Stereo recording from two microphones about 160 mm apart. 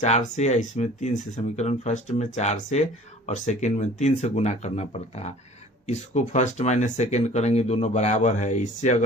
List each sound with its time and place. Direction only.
0.3 s speech: 45° left (ahead or behind)